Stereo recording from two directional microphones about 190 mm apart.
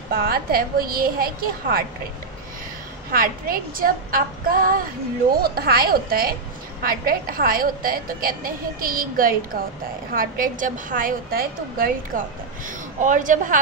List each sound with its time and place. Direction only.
0.1 s a woman's voice: 50° right (ahead or behind)
3.1 s a woman's voice: 50° right (ahead or behind)